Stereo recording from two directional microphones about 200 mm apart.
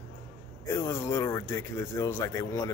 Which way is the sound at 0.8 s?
15° left (ahead or behind).